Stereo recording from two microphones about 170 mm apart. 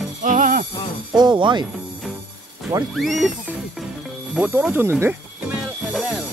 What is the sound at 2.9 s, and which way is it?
Speech, centre (ahead or behind).